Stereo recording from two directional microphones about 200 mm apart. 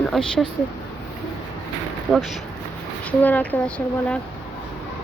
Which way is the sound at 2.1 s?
Centre (ahead or behind).